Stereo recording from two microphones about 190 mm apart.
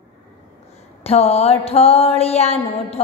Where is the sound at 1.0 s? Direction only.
30° left (ahead or behind).